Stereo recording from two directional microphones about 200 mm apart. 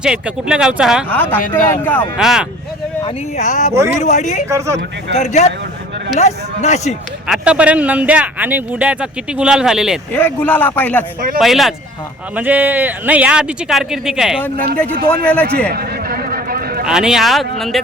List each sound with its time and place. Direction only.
0.0 s speech: 5° right (ahead or behind)
1.1 s a man's voice: 10° left (ahead or behind)
2.1 s speech: 5° right (ahead or behind)
3.3 s speech: 40° left (ahead or behind)
4.4 s speech: 15° right (ahead or behind)
5.1 s speech: 35° left (ahead or behind)
7.3 s speech: 5° right (ahead or behind)
10.1 s a man's voice: 10° left (ahead or behind)
15.7 s a sound: 50° right (ahead or behind)
16.8 s speech: 5° right (ahead or behind)